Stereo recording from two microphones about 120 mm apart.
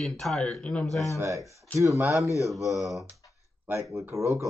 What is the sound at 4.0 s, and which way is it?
Speech, 25° right (ahead or behind).